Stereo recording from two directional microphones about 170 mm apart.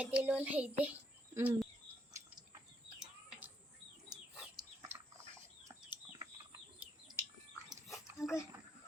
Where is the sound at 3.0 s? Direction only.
5° right (ahead or behind).